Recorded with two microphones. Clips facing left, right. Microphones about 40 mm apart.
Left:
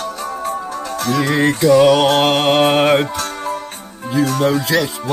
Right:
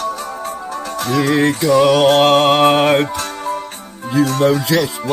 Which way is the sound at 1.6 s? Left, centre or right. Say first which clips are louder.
Left 3 dB; centre.